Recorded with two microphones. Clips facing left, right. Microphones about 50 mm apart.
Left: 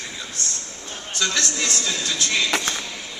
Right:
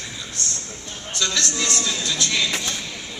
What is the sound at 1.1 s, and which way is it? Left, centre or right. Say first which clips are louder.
A man's voice: even; left.